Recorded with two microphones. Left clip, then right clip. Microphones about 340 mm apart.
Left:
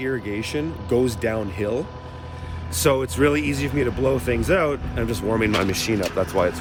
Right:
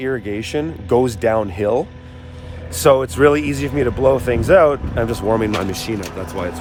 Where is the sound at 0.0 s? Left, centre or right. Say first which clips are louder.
Right 4 dB; centre.